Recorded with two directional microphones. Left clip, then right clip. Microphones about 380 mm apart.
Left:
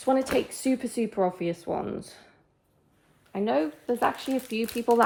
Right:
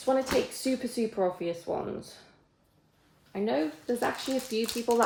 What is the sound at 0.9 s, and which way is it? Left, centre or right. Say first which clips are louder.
Speech: left 2 dB; centre.